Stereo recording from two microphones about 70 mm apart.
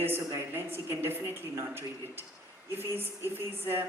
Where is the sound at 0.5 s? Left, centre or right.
Right.